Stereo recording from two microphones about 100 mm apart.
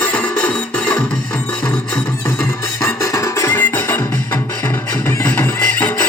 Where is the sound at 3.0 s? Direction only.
35° left (ahead or behind).